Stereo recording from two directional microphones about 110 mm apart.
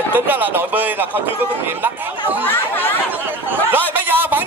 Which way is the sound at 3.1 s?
15° right (ahead or behind).